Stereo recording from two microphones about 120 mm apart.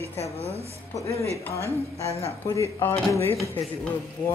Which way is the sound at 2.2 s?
25° left (ahead or behind).